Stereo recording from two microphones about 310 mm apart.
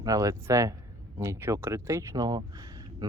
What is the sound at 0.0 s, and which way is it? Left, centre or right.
Speech, centre.